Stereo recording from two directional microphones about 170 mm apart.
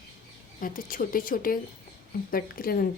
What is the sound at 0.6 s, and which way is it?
A woman's voice, 55° left (ahead or behind).